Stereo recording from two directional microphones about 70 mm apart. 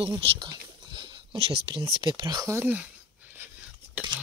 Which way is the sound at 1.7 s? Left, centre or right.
Right.